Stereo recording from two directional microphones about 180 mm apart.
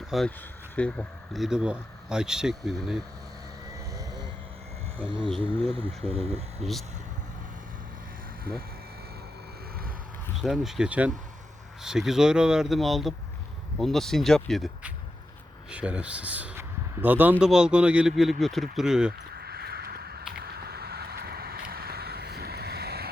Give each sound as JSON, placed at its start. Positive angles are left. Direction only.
{"t": 0.1, "sound": "speech", "side_deg": 0}
{"t": 3.9, "sound": "vehicle", "side_deg": -20}
{"t": 4.9, "sound": "speech", "side_deg": -30}
{"t": 10.3, "sound": "speech", "side_deg": 0}
{"t": 19.3, "sound": "a sound", "side_deg": -65}